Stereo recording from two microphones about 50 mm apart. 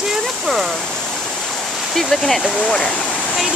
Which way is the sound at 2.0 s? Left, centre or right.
Centre.